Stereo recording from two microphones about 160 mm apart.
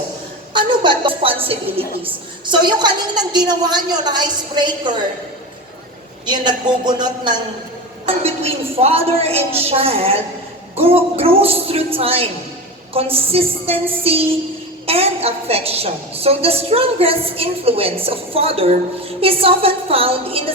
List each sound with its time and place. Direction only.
0.5 s speech: 30° right (ahead or behind)
2.5 s a woman's voice: 30° right (ahead or behind)
6.2 s a woman's voice: 30° right (ahead or behind)
8.0 s a woman's voice: 40° right (ahead or behind)